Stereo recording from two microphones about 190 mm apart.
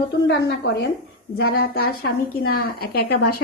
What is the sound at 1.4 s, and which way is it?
A woman's voice, 55° left (ahead or behind).